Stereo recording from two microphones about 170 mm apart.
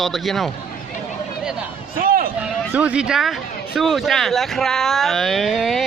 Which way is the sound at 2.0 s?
60° right (ahead or behind).